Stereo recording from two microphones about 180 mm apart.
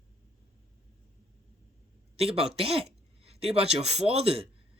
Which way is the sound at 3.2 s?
35° right (ahead or behind).